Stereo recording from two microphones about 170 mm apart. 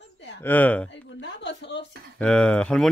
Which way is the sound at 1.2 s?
90° left.